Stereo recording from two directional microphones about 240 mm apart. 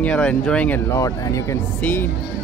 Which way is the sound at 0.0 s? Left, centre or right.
Centre.